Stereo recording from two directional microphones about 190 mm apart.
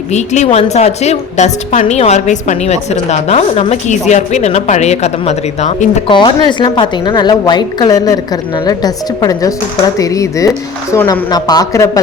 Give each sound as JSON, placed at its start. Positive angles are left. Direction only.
{"t": 0.1, "sound": "a woman's voice", "side_deg": 35}
{"t": 6.1, "sound": "a woman's voice", "side_deg": 25}